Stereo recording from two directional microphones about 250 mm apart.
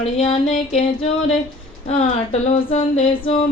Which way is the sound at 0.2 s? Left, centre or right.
Left.